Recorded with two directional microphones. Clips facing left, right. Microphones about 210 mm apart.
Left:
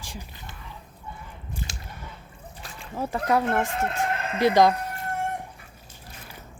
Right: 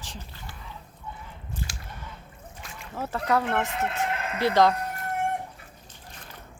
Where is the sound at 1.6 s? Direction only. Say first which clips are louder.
Even; 20° left (ahead or behind).